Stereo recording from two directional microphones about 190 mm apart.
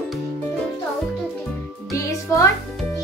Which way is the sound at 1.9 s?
15° left (ahead or behind).